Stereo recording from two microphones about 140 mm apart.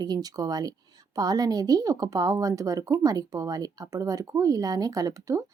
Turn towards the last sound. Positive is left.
turn(degrees=-25)  # may be behind; listen again after turning